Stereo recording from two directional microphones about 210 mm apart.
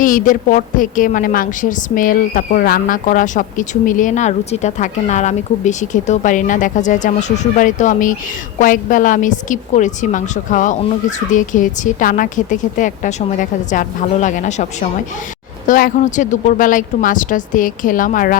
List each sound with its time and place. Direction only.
0.0 s a woman's voice: 40° left (ahead or behind)